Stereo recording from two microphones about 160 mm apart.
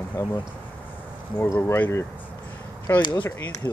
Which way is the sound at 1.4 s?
15° left (ahead or behind).